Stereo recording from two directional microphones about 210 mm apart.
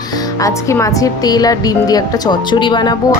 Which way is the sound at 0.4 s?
15° left (ahead or behind).